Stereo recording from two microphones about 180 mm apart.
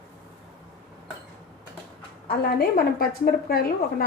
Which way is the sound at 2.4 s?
60° left (ahead or behind).